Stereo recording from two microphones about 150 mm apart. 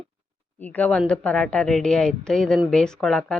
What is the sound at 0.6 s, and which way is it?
Speech, 10° left (ahead or behind).